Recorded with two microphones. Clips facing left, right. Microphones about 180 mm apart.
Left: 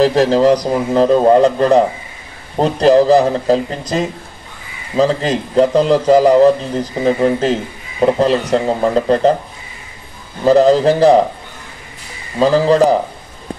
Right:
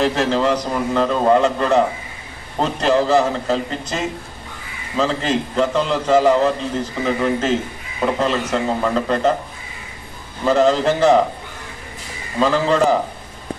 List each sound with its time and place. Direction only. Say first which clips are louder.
0.0 s a man's voice: left 7 dB; 35° left (ahead or behind)
10.4 s a man's voice: left 6 dB; 35° left (ahead or behind)
12.4 s a man's voice: left 5 dB; 35° left (ahead or behind)